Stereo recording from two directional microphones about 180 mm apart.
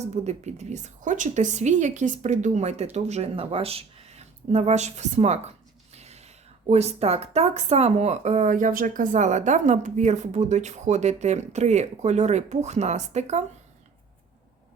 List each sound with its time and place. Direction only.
0.0 s a woman's voice: 40° right (ahead or behind)